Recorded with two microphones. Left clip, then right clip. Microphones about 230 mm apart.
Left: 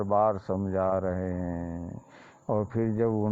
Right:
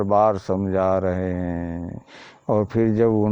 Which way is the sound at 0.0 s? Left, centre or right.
Right.